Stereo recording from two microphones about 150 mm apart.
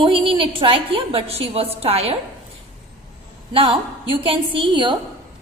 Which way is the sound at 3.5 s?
35° right (ahead or behind).